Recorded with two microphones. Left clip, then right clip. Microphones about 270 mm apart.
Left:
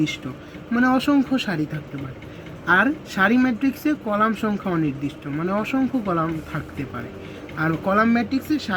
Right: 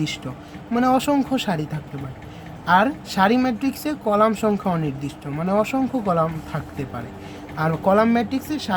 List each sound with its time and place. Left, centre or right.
0.7 s speech: right
2.6 s speech: right